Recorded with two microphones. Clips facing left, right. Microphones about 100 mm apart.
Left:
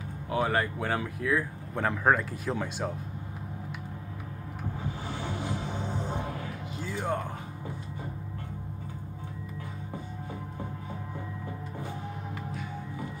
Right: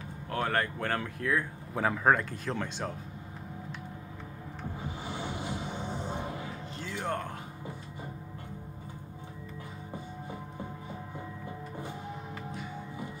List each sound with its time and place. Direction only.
0.3 s speech: 10° left (ahead or behind)
5.2 s music: 15° right (ahead or behind)
6.8 s speech: 10° left (ahead or behind)